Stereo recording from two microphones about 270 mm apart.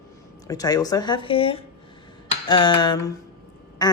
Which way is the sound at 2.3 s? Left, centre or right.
Centre.